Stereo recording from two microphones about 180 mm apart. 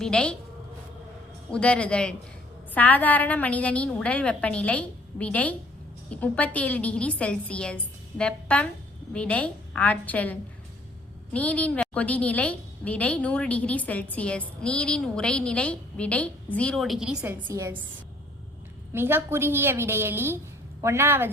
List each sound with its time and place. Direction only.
0.0 s a man's voice: 5° left (ahead or behind)
1.5 s a man's voice: 5° left (ahead or behind)
11.3 s a woman's voice: 10° left (ahead or behind); by 17.7 s 15° right (ahead or behind)
18.9 s a woman's voice: 15° right (ahead or behind)